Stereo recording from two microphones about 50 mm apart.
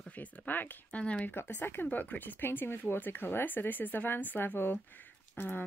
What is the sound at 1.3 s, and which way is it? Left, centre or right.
Speech, left.